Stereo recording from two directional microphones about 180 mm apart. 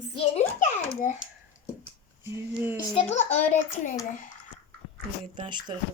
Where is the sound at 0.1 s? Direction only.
30° left (ahead or behind).